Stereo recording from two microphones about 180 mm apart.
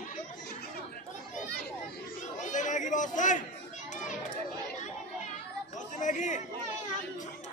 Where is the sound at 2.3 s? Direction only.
45° left (ahead or behind).